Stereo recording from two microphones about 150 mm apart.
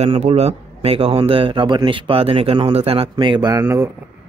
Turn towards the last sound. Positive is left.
turn(degrees=-15)  # may be behind; listen again after turning